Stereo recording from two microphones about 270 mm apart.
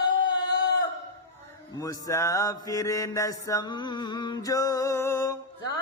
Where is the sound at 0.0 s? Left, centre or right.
Centre.